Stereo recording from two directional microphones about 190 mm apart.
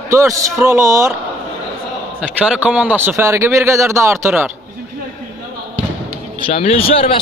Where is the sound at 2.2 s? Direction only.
5° right (ahead or behind).